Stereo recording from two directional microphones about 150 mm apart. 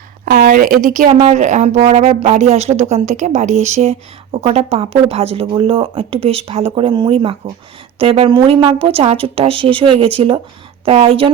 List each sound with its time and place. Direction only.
0.3 s speech: 70° right (ahead or behind); by 11.3 s 40° right (ahead or behind)